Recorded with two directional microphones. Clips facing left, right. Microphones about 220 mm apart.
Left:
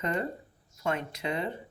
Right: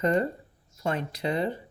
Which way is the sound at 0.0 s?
35° right (ahead or behind).